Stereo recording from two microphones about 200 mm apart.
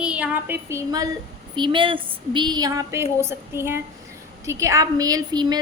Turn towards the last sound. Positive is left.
turn(degrees=-20)  # may be behind; listen again after turning